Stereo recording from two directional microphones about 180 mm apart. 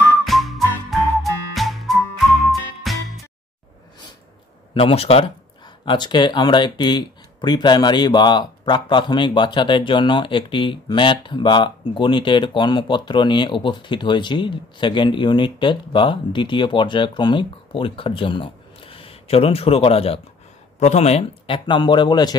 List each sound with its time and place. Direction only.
0.2 s music: centre (ahead or behind)
4.7 s speech: 30° left (ahead or behind)